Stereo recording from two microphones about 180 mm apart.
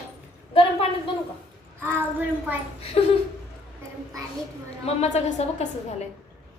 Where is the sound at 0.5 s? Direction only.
30° left (ahead or behind).